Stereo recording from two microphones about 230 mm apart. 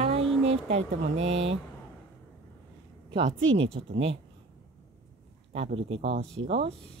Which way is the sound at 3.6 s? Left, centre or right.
Right.